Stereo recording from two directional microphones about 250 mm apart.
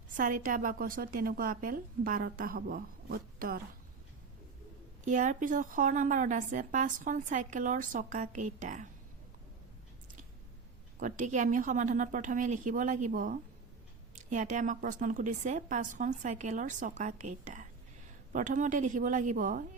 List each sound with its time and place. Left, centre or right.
0.2 s a woman's voice: right
5.0 s a woman's voice: right
11.0 s a woman's voice: right